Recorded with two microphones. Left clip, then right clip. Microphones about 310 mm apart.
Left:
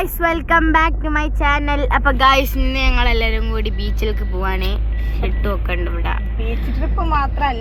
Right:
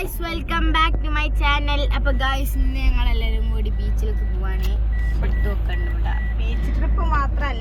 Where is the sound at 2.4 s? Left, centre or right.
Centre.